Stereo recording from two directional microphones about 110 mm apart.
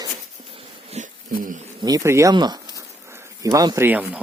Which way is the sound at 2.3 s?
40° right (ahead or behind).